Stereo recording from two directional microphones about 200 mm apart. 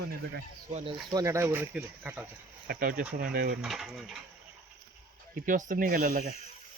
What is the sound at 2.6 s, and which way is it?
Speech, 50° right (ahead or behind).